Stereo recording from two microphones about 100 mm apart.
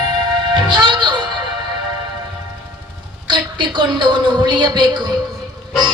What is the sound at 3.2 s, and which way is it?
A woman's voice, 50° right (ahead or behind).